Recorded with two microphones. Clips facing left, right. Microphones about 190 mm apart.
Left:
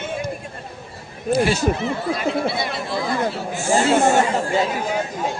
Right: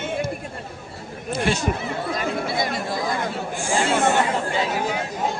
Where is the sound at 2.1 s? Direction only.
45° right (ahead or behind).